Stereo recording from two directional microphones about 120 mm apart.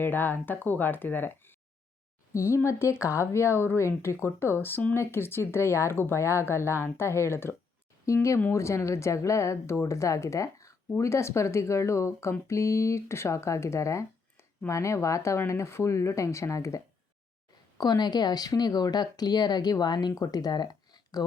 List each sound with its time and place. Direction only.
0.0 s a woman's voice: 15° left (ahead or behind); by 21.2 s 35° left (ahead or behind)